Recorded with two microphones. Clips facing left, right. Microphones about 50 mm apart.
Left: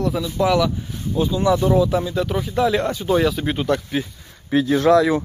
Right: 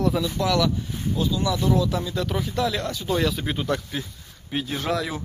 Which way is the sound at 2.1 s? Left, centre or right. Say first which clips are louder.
Left 4 dB; centre.